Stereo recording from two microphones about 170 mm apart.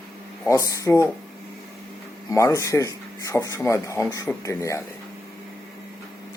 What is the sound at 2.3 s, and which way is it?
Speech, 20° left (ahead or behind).